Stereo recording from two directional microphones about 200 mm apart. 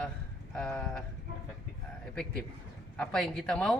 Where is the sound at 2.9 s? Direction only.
Centre (ahead or behind).